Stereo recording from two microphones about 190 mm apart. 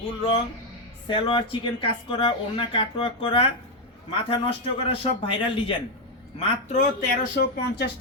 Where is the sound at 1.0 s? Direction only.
25° left (ahead or behind).